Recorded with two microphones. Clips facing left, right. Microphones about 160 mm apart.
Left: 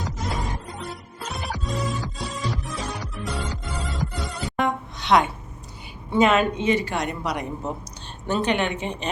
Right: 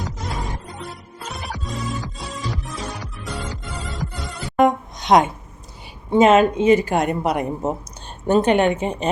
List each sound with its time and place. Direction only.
0.0 s music: centre (ahead or behind)
4.5 s a sound: 45° right (ahead or behind)
6.1 s speech: 45° right (ahead or behind)